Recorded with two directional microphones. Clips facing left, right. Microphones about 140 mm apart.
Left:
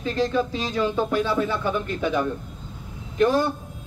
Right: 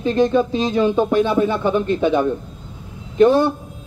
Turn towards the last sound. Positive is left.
turn(degrees=-25)  # may be behind; listen again after turning